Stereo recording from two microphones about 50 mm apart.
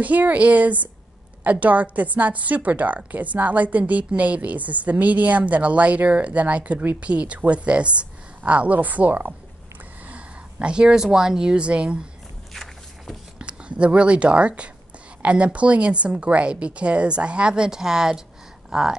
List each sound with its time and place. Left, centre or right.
0.0 s a woman's voice: right
13.4 s speech: right